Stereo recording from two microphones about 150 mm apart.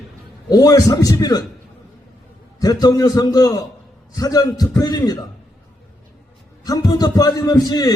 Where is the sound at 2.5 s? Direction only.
25° left (ahead or behind).